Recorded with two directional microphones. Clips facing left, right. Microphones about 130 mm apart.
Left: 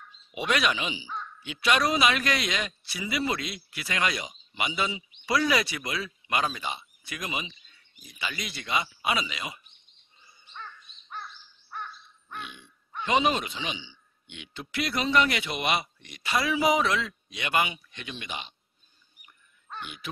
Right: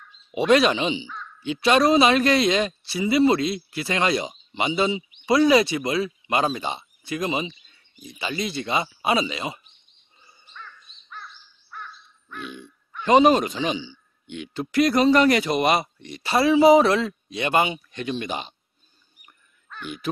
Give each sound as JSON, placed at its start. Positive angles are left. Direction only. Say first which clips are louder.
{"t": 0.3, "sound": "a man's voice", "louder": "right 9 dB", "side_deg": -30}
{"t": 12.4, "sound": "a man's voice", "louder": "right 6 dB", "side_deg": -40}
{"t": 19.8, "sound": "a man's voice", "louder": "right 9 dB", "side_deg": -40}